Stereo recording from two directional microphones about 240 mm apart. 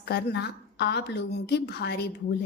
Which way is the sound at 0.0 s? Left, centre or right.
Left.